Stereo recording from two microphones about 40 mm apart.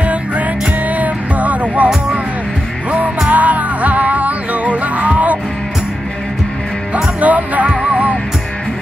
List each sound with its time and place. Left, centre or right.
0.0 s music: right
3.3 s music: right
7.2 s music: right